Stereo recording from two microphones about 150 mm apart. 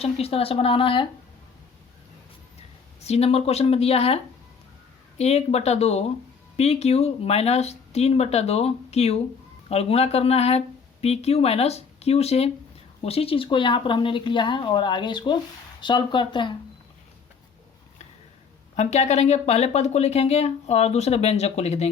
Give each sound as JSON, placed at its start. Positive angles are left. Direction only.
{"t": 0.0, "sound": "speech", "side_deg": 40}
{"t": 3.0, "sound": "speech", "side_deg": 45}
{"t": 18.8, "sound": "speech", "side_deg": 50}